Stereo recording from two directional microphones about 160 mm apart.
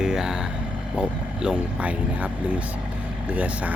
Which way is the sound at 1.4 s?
10° right (ahead or behind).